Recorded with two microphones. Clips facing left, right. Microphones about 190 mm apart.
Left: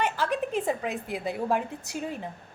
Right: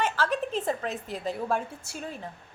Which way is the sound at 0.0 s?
15° left (ahead or behind).